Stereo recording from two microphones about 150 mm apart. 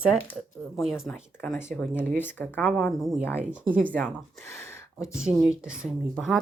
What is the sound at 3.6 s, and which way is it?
Speech, 65° right (ahead or behind).